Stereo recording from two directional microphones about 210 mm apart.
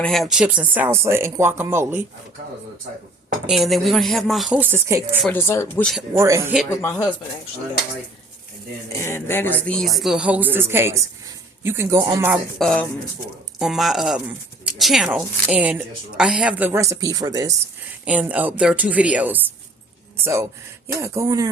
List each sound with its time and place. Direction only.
0.0 s a woman's voice: centre (ahead or behind)
3.4 s speech: centre (ahead or behind)
5.2 s speech: 10° left (ahead or behind)
6.1 s a woman's voice: 15° right (ahead or behind)
6.7 s speech: 15° left (ahead or behind)
8.9 s a woman's voice: 15° left (ahead or behind); by 12.4 s 10° right (ahead or behind)
12.5 s a woman's voice: 5° left (ahead or behind); by 17.5 s 15° right (ahead or behind)
18.0 s a woman's voice: 5° right (ahead or behind)
20.8 s a woman's voice: 15° right (ahead or behind)